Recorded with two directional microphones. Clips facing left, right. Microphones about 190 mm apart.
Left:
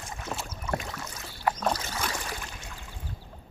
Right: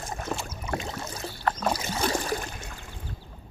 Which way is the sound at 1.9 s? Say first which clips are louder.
Right 7 dB; 35° right (ahead or behind).